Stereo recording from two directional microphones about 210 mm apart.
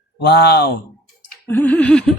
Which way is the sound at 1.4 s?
10° left (ahead or behind).